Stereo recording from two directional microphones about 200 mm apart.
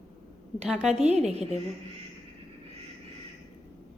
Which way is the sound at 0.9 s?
35° right (ahead or behind).